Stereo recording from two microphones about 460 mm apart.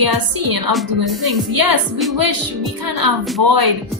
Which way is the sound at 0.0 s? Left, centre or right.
Right.